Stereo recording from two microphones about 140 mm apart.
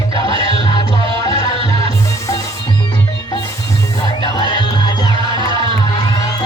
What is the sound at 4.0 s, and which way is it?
Music, 30° left (ahead or behind).